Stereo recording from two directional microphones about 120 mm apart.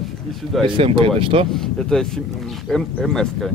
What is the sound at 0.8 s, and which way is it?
Speech, 45° right (ahead or behind).